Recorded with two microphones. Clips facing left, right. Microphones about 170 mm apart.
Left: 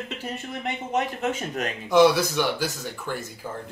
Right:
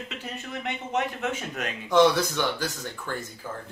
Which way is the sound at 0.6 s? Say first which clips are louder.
Left 2 dB; 45° left (ahead or behind).